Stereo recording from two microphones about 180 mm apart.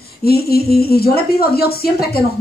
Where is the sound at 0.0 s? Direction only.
60° left (ahead or behind).